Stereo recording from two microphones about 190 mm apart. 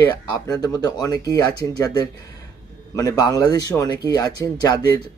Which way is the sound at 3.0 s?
20° left (ahead or behind).